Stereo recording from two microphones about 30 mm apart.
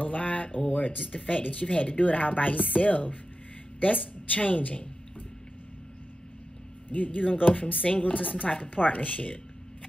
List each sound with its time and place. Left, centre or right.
0.0 s a sound: left
0.6 s a woman's voice: left
4.3 s a woman's voice: left
6.9 s a woman's voice: left